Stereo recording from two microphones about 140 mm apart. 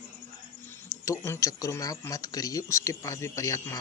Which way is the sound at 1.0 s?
20° left (ahead or behind).